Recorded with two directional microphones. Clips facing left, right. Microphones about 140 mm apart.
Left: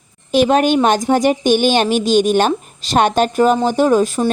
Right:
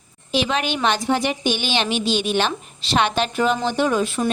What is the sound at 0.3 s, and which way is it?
Speech, 45° left (ahead or behind).